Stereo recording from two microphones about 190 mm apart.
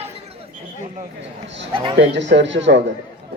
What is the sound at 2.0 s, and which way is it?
Speech, 70° right (ahead or behind).